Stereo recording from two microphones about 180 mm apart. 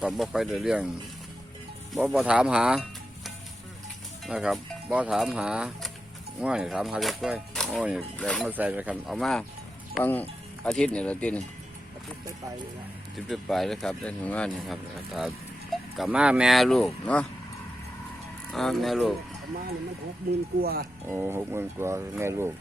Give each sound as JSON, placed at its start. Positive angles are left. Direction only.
{"t": 0.0, "sound": "speech", "side_deg": 0}
{"t": 2.0, "sound": "speech", "side_deg": -5}
{"t": 4.3, "sound": "speech", "side_deg": -5}
{"t": 13.1, "sound": "speech", "side_deg": 0}
{"t": 18.5, "sound": "speech", "side_deg": 0}
{"t": 20.6, "sound": "speech", "side_deg": -60}
{"t": 21.1, "sound": "speech", "side_deg": -15}